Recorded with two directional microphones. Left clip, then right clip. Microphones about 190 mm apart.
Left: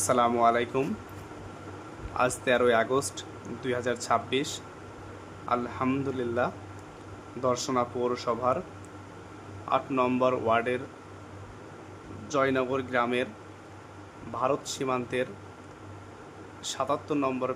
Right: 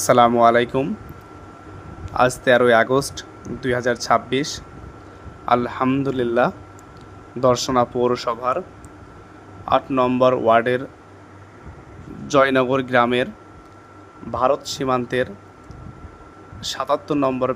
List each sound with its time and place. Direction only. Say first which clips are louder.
0.0 s speech: right 10 dB; 35° right (ahead or behind)
2.1 s speech: right 10 dB; 35° right (ahead or behind)
5.5 s speech: right 10 dB; 40° right (ahead or behind)
9.6 s speech: right 8 dB; 35° right (ahead or behind)
12.3 s speech: right 10 dB; 45° right (ahead or behind)
14.3 s speech: right 9 dB; 40° right (ahead or behind)
16.6 s speech: right 8 dB; 35° right (ahead or behind)